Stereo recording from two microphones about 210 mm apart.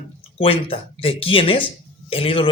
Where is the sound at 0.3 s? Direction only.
25° left (ahead or behind).